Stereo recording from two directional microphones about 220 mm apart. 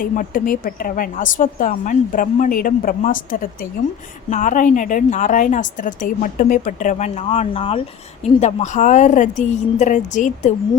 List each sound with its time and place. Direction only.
0.0 s a woman's voice: 40° left (ahead or behind)